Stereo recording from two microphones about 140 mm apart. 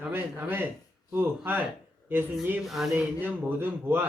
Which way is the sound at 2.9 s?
15° right (ahead or behind).